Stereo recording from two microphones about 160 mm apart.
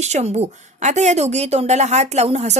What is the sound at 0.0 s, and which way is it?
A woman's voice, 45° right (ahead or behind).